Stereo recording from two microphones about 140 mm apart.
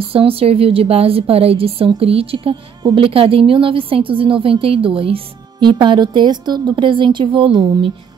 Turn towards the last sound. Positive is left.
turn(degrees=-30)  # may be behind; listen again after turning